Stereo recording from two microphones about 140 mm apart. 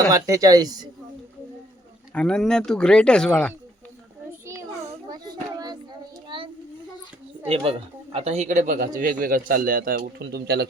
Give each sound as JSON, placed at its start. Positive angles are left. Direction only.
{"t": 0.1, "sound": "speech", "side_deg": -25}
{"t": 2.1, "sound": "speech", "side_deg": 5}
{"t": 5.0, "sound": "children playing", "side_deg": -30}
{"t": 6.2, "sound": "a sound", "side_deg": -35}
{"t": 7.4, "sound": "a woman's voice", "side_deg": -45}